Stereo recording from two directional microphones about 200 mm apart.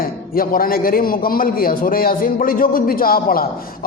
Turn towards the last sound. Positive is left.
turn(degrees=45)  # may be behind; listen again after turning